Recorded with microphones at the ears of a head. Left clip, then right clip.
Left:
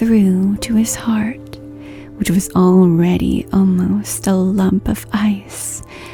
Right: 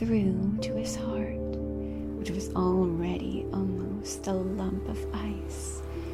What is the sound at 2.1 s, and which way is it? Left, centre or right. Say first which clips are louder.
Speech: left 16 dB; left.